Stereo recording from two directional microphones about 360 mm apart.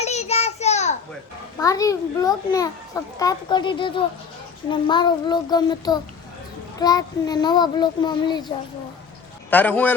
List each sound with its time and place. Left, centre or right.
0.0 s child singing: centre
9.5 s a man's voice: centre